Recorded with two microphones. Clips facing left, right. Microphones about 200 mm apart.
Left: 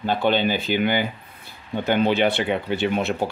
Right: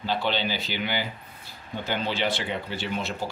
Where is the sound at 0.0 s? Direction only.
50° left (ahead or behind).